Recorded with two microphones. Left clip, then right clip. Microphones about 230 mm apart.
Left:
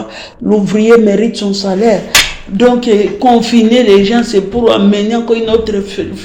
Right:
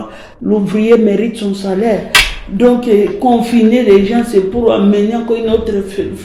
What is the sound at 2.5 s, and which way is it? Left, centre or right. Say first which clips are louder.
Speech: left 1 dB; left.